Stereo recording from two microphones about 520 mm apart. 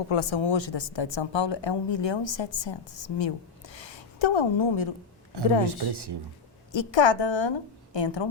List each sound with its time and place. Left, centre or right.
0.1 s a woman's voice: left
5.9 s speech: right
6.7 s a woman's voice: left